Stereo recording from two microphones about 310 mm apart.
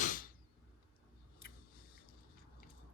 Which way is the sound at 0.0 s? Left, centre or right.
Left.